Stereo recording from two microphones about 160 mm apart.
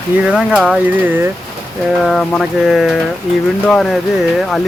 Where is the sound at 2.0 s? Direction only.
Centre (ahead or behind).